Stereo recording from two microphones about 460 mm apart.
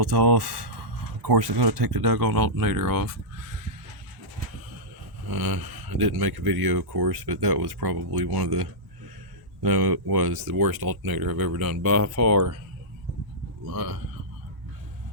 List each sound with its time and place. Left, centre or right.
0.1 s speech: right
5.2 s speech: right
9.6 s speech: right
11.9 s speech: right
13.7 s speech: right